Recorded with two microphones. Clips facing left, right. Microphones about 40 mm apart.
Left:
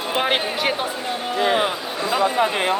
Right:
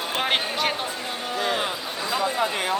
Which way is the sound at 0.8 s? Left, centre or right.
Left.